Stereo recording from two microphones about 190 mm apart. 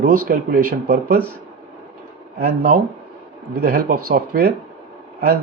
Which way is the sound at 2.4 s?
50° right (ahead or behind).